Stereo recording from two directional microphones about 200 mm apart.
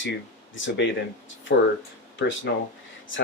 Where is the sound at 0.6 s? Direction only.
65° left (ahead or behind).